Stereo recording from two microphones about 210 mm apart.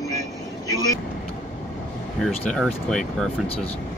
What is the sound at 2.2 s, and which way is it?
Speech, centre (ahead or behind).